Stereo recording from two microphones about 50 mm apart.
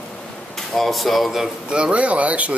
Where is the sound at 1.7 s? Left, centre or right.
Right.